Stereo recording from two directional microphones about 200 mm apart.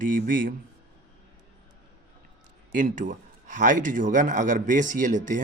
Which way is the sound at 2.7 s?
40° right (ahead or behind).